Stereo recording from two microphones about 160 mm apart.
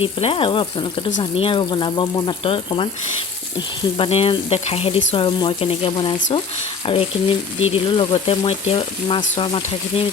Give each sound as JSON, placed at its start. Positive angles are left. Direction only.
{"t": 0.0, "sound": "speech", "side_deg": 35}
{"t": 3.9, "sound": "speech", "side_deg": 35}